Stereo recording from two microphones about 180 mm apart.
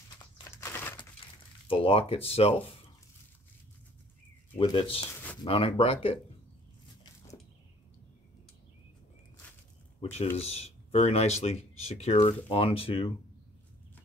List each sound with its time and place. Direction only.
0.4 s a sound: 15° left (ahead or behind)
1.2 s crumpling: 30° left (ahead or behind)
1.7 s speech: 30° left (ahead or behind)
4.6 s speech: 30° left (ahead or behind)
5.0 s a sound: 10° left (ahead or behind)
5.4 s speech: 30° left (ahead or behind)
10.3 s speech: 35° left (ahead or behind)